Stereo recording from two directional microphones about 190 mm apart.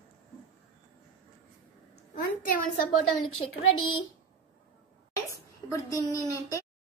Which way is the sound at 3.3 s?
90° left.